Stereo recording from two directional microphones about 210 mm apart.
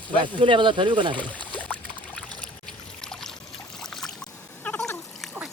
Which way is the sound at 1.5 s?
5° left (ahead or behind).